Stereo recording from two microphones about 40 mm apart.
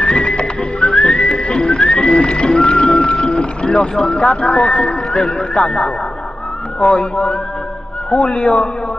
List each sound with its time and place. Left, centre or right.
0.0 s music: left
0.9 s whistling: centre
2.2 s music: centre
3.2 s vehicle: centre
4.2 s speech: centre
7.0 s speech: centre
8.1 s speech: centre
8.4 s speech: centre